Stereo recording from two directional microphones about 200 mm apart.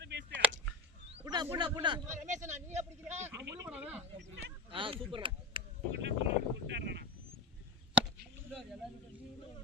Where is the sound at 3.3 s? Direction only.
15° right (ahead or behind).